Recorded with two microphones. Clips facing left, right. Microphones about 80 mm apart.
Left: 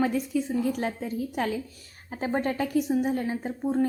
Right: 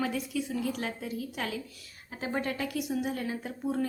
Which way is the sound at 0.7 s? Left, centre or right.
Left.